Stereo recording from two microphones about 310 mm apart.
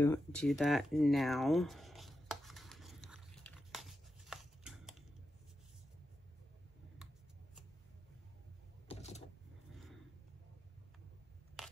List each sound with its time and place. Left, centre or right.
0.0 s a sound: centre
8.8 s vehicle: left
11.6 s crushing: centre